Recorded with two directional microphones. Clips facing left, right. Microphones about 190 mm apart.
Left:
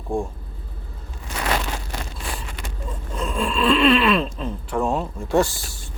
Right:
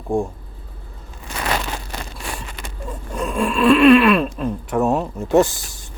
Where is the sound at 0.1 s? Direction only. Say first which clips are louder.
Right 4 dB; 15° right (ahead or behind).